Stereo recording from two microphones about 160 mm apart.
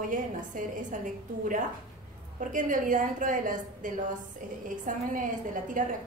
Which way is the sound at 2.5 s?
55° right (ahead or behind).